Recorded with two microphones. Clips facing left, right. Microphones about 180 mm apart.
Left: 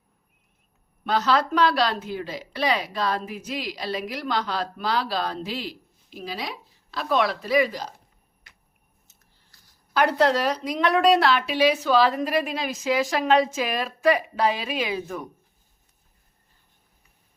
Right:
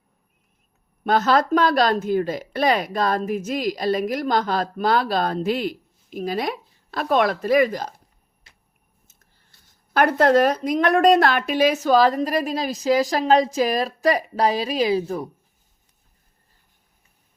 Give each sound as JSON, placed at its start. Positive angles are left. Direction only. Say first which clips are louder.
{"t": 1.0, "sound": "speech", "louder": "right 4 dB", "side_deg": -50}
{"t": 9.9, "sound": "a woman's voice", "louder": "right 4 dB", "side_deg": -50}